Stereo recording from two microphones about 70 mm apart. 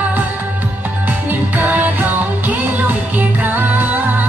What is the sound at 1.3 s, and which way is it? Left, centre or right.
Music, right.